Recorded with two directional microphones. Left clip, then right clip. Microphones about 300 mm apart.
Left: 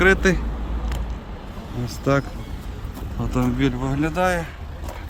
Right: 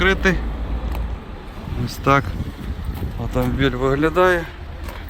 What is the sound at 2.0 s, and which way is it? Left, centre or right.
Speech, centre.